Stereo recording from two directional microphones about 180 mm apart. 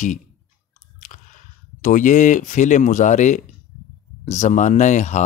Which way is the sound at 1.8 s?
45° left (ahead or behind).